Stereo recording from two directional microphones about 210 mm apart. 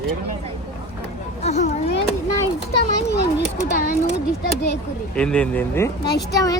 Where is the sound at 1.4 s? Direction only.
35° left (ahead or behind).